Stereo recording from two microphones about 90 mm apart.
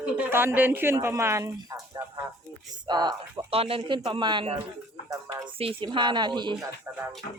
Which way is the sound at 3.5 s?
90° right.